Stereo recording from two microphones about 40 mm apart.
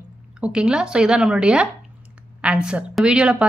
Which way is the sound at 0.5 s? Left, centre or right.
Right.